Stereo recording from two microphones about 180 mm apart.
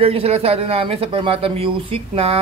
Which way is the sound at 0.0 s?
35° right (ahead or behind).